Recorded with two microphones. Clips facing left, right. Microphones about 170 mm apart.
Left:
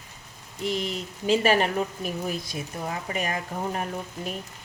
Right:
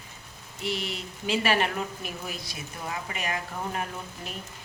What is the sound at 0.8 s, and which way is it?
A woman's voice, 40° left (ahead or behind).